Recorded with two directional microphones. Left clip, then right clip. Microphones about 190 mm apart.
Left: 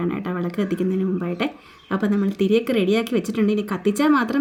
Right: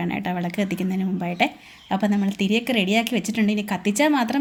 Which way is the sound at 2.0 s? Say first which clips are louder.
Left 4 dB; 10° left (ahead or behind).